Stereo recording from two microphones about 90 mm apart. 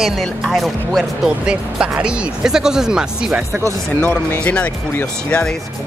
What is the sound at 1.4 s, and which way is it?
Speech, 10° right (ahead or behind).